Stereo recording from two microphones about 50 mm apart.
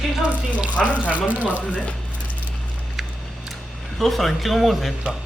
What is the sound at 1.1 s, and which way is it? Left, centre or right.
Speech, right.